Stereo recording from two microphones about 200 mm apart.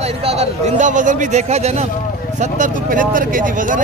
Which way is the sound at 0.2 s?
30° right (ahead or behind).